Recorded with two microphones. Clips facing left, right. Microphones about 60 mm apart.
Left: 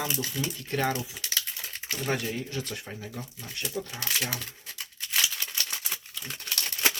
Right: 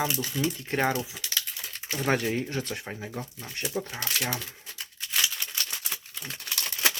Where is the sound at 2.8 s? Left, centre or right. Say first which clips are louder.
Right 3 dB; right.